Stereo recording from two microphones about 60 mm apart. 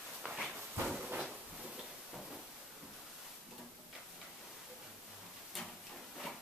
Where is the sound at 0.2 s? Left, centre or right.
Centre.